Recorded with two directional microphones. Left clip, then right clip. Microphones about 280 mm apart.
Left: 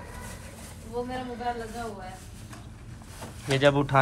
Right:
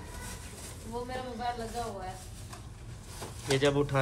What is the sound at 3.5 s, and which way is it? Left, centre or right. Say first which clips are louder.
Speech: left 5 dB; centre.